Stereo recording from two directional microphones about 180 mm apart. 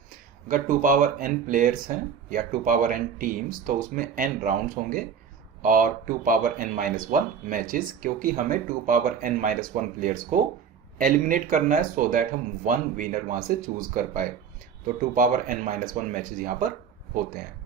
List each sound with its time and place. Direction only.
0.1 s speech: 50° right (ahead or behind)